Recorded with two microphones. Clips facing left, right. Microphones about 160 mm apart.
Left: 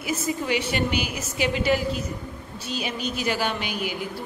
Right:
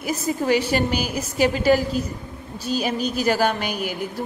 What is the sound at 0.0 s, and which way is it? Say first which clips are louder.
A woman's voice: right 3 dB; 40° right (ahead or behind).